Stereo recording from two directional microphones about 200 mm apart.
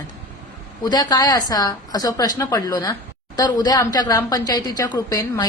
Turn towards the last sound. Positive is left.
turn(degrees=15)  # may be behind; listen again after turning